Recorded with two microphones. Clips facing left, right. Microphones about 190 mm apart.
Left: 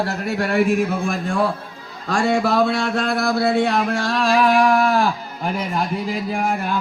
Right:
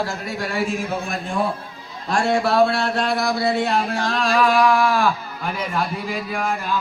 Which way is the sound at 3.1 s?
55° left (ahead or behind).